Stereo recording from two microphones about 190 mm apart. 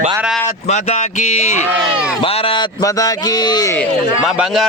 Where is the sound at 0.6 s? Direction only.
35° left (ahead or behind); by 3.8 s 20° left (ahead or behind).